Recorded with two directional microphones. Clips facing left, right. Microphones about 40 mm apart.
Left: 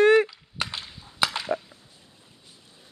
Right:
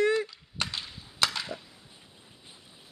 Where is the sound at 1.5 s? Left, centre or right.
Left.